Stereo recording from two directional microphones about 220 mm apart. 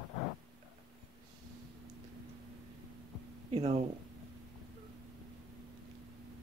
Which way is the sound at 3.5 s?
30° right (ahead or behind).